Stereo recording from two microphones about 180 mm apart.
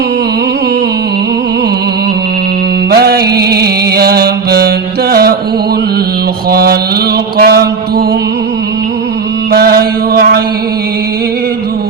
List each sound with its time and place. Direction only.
2.9 s music: 60° right (ahead or behind)
6.5 s mantra: 60° right (ahead or behind)
9.5 s mantra: 60° right (ahead or behind)